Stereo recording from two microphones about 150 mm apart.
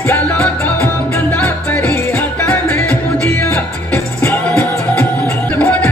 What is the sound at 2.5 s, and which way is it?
Music, 10° left (ahead or behind).